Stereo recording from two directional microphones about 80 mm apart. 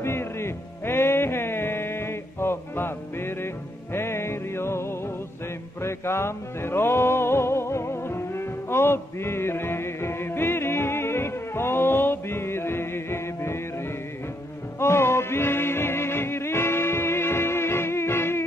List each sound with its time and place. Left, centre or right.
0.0 s music: left
14.8 s music: left